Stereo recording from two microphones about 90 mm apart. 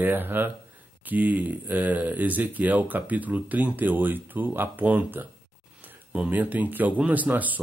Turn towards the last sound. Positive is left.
turn(degrees=-20)  # may be behind; listen again after turning